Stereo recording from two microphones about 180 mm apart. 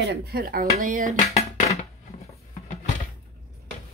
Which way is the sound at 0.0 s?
65° right (ahead or behind).